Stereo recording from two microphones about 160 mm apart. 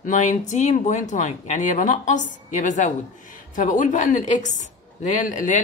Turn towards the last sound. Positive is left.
turn(degrees=55)  # may be behind; listen again after turning